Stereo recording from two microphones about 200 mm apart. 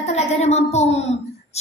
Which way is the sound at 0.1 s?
30° left (ahead or behind).